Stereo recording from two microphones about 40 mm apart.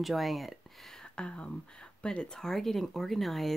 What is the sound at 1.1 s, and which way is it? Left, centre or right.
Speech, left.